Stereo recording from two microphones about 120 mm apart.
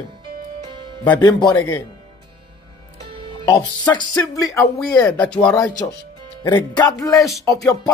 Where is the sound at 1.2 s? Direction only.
35° left (ahead or behind).